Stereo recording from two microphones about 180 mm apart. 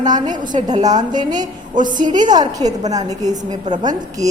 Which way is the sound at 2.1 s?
25° right (ahead or behind).